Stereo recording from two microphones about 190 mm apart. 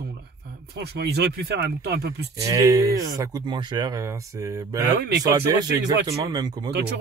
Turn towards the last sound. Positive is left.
turn(degrees=-60)  # may be behind; listen again after turning